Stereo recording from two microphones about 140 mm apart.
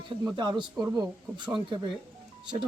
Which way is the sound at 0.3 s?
35° right (ahead or behind).